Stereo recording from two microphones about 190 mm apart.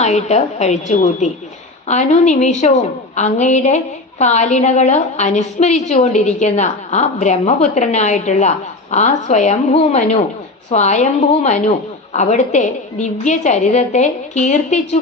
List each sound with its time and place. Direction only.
0.0 s a woman's voice: 35° left (ahead or behind)